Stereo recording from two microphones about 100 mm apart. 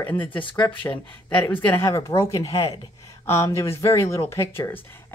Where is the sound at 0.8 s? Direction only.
30° left (ahead or behind).